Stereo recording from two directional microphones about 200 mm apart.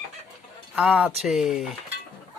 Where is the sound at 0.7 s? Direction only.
5° right (ahead or behind).